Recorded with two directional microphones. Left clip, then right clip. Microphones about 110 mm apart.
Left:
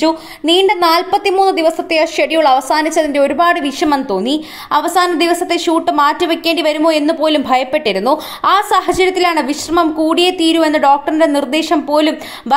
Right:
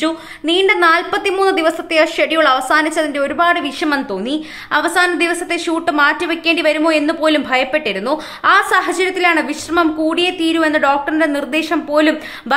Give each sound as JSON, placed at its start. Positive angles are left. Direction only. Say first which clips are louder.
{"t": 0.5, "sound": "a woman's voice", "louder": "left 1 dB", "side_deg": 35}